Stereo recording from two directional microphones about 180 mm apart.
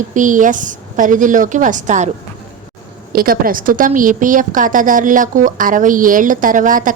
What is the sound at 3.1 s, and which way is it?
A woman's voice, 55° right (ahead or behind).